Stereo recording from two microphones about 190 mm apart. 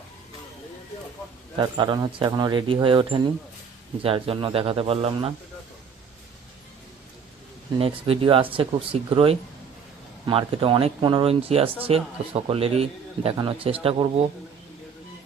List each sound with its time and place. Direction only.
1.5 s speech: 25° right (ahead or behind)
7.8 s speech: 30° right (ahead or behind)